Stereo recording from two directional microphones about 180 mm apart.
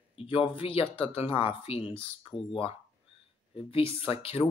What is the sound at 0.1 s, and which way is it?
Speech, 30° left (ahead or behind).